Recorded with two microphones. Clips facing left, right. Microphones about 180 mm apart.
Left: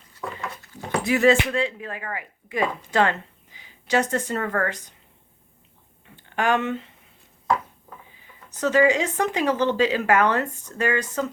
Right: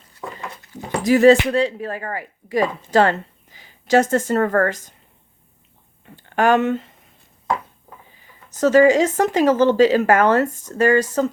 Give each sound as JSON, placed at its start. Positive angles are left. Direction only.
{"t": 1.0, "sound": "speech", "side_deg": -35}
{"t": 6.3, "sound": "speech", "side_deg": -45}
{"t": 8.6, "sound": "speech", "side_deg": -40}